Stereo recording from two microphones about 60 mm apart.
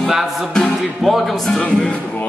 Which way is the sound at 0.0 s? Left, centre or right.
Centre.